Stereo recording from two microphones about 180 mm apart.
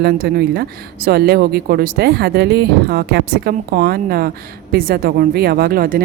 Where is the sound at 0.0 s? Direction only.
60° right (ahead or behind).